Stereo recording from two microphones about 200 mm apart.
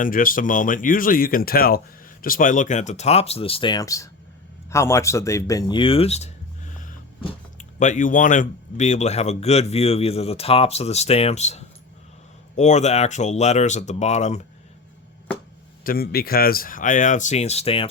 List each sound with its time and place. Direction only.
0.0 s speech: 45° left (ahead or behind)
15.8 s speech: 45° left (ahead or behind); by 17.8 s 30° left (ahead or behind)